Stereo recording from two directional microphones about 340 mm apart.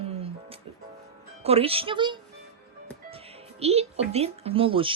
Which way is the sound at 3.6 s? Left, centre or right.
Centre.